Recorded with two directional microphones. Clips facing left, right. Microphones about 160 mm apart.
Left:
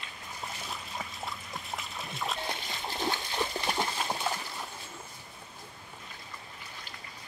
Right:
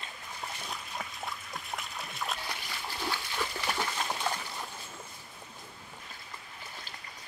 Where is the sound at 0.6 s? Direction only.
Centre (ahead or behind).